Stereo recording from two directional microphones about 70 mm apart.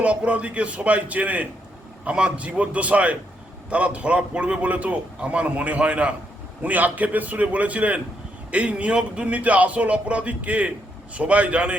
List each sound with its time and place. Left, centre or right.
0.0 s a man's voice: centre